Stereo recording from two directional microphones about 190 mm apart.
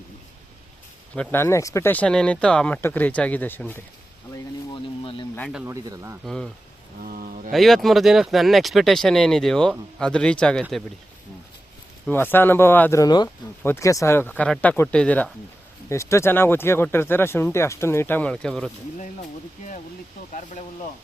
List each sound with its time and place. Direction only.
1.1 s speech: 10° left (ahead or behind)
4.7 s a sound: 25° left (ahead or behind)
5.6 s speech: 15° right (ahead or behind)
6.2 s speech: 5° left (ahead or behind)
7.0 s speech: 50° right (ahead or behind)
7.5 s speech: centre (ahead or behind)
12.0 s speech: 10° left (ahead or behind)